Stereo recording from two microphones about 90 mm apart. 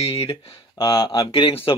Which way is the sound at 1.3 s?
85° left.